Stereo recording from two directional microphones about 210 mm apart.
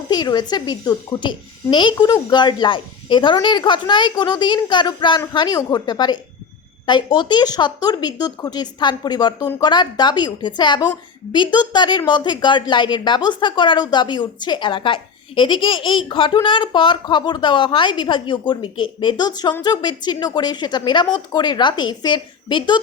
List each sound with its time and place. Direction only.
0.1 s speech: 20° left (ahead or behind)